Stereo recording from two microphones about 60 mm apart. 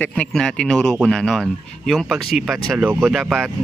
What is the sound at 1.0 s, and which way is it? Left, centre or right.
Speech, centre.